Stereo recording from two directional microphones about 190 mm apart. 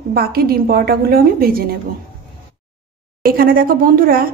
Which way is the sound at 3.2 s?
50° right (ahead or behind).